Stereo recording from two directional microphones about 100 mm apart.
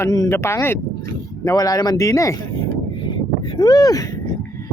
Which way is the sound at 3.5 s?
45° left (ahead or behind).